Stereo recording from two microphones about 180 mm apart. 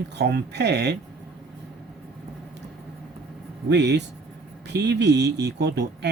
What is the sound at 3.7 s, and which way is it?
Speech, 70° right (ahead or behind).